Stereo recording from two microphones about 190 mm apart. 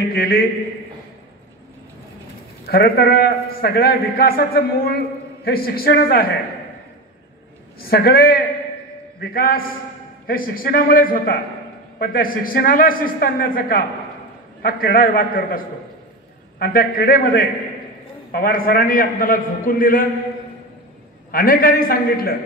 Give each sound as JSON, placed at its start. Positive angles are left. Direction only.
{"t": 0.1, "sound": "a man's voice", "side_deg": 50}
{"t": 2.6, "sound": "a man's voice", "side_deg": 55}
{"t": 7.8, "sound": "a man's voice", "side_deg": 55}
{"t": 21.3, "sound": "a man's voice", "side_deg": 50}